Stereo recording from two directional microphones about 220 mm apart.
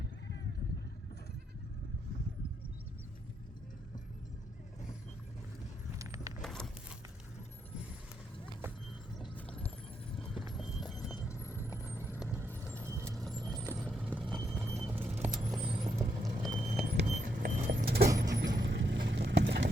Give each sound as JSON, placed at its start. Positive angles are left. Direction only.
{"t": 6.0, "sound": "keys jangling", "side_deg": -15}
{"t": 6.4, "sound": "a sound", "side_deg": 5}
{"t": 10.5, "sound": "clip-clop", "side_deg": 0}
{"t": 11.1, "sound": "vehicle", "side_deg": 15}
{"t": 11.9, "sound": "vehicle", "side_deg": -5}
{"t": 13.1, "sound": "vehicle", "side_deg": 0}
{"t": 14.3, "sound": "horse", "side_deg": -5}
{"t": 15.2, "sound": "a sound", "side_deg": -5}
{"t": 15.8, "sound": "vehicle", "side_deg": -20}
{"t": 16.5, "sound": "vehicle", "side_deg": -30}
{"t": 17.2, "sound": "keys jangling", "side_deg": -40}
{"t": 18.3, "sound": "vehicle", "side_deg": -50}